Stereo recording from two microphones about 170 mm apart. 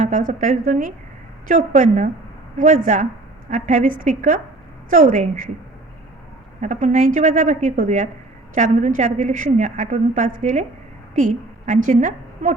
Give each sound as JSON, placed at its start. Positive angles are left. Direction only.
{"t": 0.0, "sound": "a woman's voice", "side_deg": -50}
{"t": 6.6, "sound": "a woman's voice", "side_deg": -45}